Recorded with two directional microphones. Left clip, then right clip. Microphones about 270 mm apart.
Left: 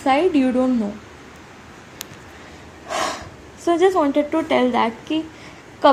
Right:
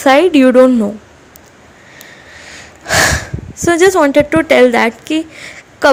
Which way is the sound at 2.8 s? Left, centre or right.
Right.